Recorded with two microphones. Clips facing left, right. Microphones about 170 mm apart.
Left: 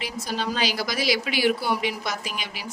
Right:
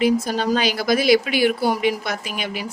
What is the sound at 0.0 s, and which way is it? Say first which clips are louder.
A woman's voice: right 10 dB; 50° right (ahead or behind).